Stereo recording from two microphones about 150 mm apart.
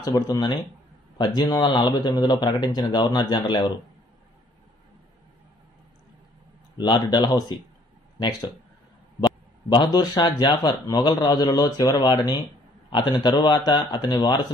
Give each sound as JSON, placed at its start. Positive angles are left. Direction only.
{"t": 0.0, "sound": "speech", "side_deg": 25}
{"t": 6.7, "sound": "speech", "side_deg": 30}
{"t": 9.2, "sound": "speech", "side_deg": 30}